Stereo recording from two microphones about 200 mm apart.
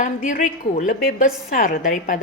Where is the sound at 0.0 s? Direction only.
40° left (ahead or behind).